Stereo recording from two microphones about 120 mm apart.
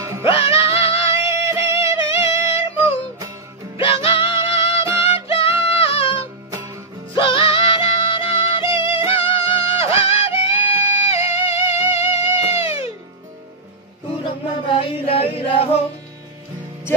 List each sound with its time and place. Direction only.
0.2 s music: 45° left (ahead or behind)
1.2 s music: 25° right (ahead or behind)
2.2 s female singing: 55° left (ahead or behind)
3.7 s music: 45° left (ahead or behind)
14.2 s a sound: 45° left (ahead or behind)